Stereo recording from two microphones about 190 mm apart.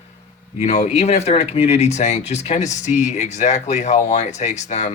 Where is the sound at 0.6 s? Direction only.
35° left (ahead or behind).